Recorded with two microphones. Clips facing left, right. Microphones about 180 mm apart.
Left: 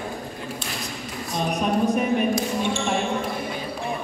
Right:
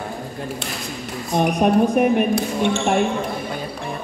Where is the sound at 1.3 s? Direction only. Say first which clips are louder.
Right 7 dB; 60° right (ahead or behind).